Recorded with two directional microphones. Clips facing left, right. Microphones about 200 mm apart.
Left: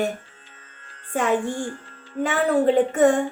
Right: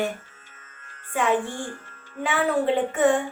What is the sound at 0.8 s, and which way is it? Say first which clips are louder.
Music: left 1 dB; 45° left (ahead or behind).